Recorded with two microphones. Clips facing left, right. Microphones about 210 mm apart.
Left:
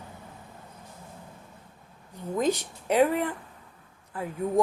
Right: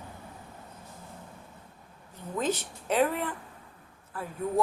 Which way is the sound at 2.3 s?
10° left (ahead or behind).